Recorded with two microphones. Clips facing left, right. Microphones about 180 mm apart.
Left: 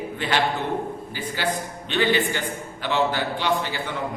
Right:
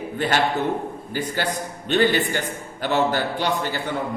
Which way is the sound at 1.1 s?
45° right (ahead or behind).